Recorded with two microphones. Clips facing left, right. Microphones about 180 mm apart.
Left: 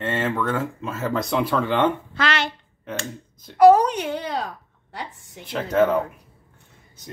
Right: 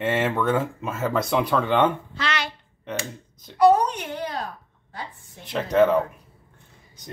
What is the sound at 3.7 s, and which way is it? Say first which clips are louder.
Baby cry: left 4 dB; 90° left.